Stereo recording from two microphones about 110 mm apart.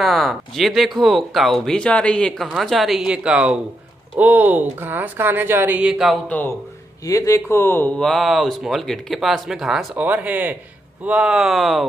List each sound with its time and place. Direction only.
0.0 s a woman's voice: centre (ahead or behind)
6.2 s speech: 15° left (ahead or behind)
7.1 s speech: 30° left (ahead or behind)
8.0 s a woman's voice: centre (ahead or behind)